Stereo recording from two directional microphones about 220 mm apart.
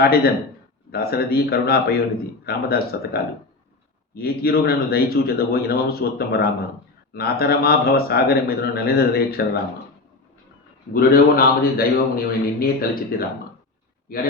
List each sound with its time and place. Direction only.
0.9 s a man's voice: 45° left (ahead or behind)
10.9 s a man's voice: 40° left (ahead or behind)